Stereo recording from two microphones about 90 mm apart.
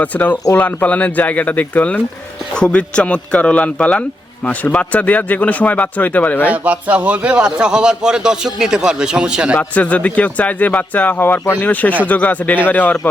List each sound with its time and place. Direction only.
0.0 s speech: 15° left (ahead or behind)
6.5 s a man's voice: 15° right (ahead or behind)
9.6 s speech: 15° left (ahead or behind)